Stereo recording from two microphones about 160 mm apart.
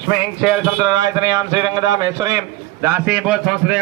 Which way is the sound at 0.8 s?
25° right (ahead or behind).